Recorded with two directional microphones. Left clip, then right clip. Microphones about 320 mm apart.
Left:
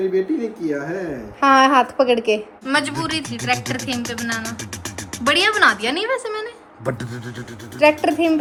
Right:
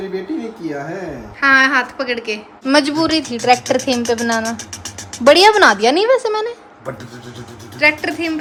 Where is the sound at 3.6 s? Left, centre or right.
Centre.